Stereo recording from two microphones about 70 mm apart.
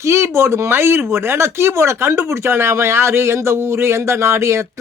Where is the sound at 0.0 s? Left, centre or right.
Right.